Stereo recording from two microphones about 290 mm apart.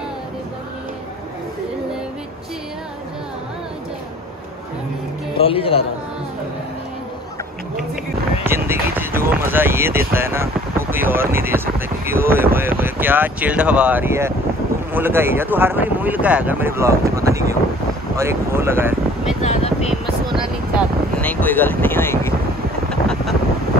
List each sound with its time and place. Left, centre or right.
5.4 s speech: centre
8.5 s speech: centre
19.4 s a sound: left
20.3 s speech: centre
22.8 s wind noise: centre